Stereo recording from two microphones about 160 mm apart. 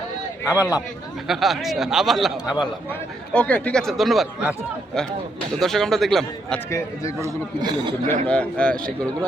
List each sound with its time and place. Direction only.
0.5 s speech: 20° left (ahead or behind)
1.3 s speech: centre (ahead or behind)
5.5 s speech: centre (ahead or behind)
6.7 s a man's voice: 20° left (ahead or behind)
7.2 s a man's voice: 20° right (ahead or behind)
8.0 s a man's voice: 10° left (ahead or behind)